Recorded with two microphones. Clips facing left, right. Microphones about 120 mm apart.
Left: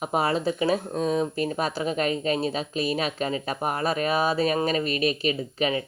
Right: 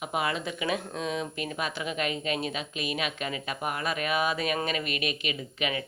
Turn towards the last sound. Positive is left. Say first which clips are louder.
# left 6 dB
turn(degrees=35)  # may be behind; listen again after turning